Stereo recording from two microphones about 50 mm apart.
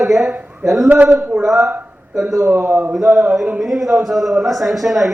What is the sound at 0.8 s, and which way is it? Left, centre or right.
Speech, right.